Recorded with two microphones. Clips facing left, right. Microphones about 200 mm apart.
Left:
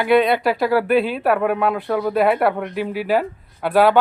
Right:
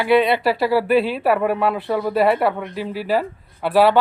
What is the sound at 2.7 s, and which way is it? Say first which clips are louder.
Speech: left 3 dB; 55° left (ahead or behind).